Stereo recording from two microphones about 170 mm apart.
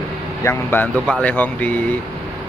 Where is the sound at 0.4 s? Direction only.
15° left (ahead or behind).